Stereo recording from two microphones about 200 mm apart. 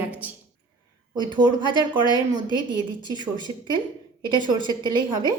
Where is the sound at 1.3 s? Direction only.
20° right (ahead or behind).